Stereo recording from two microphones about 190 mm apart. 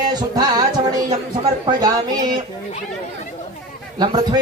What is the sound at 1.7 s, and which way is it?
Speech, 20° right (ahead or behind).